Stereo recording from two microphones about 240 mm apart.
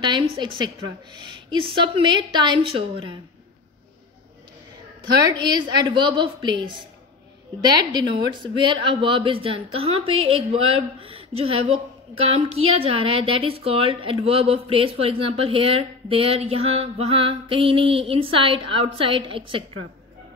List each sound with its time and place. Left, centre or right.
0.4 s speech: centre
5.1 s speech: centre